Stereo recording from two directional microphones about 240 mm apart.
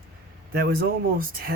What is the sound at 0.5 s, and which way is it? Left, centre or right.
Speech, right.